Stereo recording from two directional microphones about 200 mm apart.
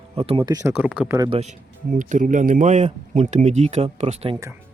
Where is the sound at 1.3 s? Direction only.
35° right (ahead or behind).